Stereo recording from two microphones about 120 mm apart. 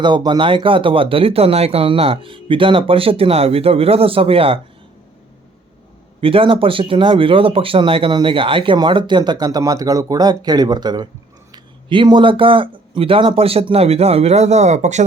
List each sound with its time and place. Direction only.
0.0 s speech: 40° right (ahead or behind)
6.1 s speech: 50° right (ahead or behind); by 15.0 s 75° right (ahead or behind)